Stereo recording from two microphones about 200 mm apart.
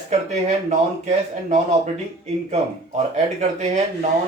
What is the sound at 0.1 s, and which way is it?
A man's voice, 35° right (ahead or behind).